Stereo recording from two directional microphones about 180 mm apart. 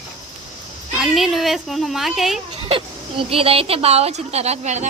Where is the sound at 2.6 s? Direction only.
30° right (ahead or behind).